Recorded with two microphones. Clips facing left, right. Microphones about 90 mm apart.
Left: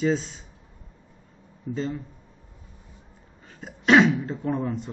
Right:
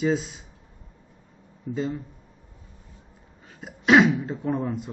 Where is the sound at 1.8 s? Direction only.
10° right (ahead or behind).